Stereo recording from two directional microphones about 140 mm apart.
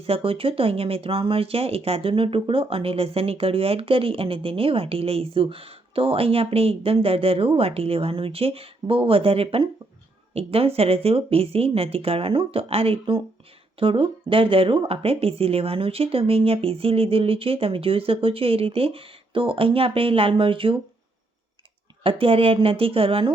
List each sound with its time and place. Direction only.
0.1 s speech: 40° right (ahead or behind)
22.0 s speech: 40° right (ahead or behind)